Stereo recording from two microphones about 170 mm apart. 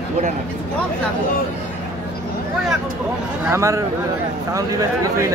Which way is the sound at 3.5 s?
15° right (ahead or behind).